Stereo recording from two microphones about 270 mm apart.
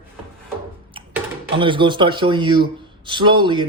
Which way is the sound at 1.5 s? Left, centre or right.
Centre.